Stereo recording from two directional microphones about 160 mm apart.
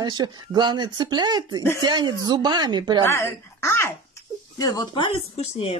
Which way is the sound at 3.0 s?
15° left (ahead or behind).